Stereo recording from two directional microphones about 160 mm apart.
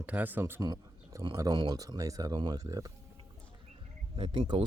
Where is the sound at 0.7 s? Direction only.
25° right (ahead or behind).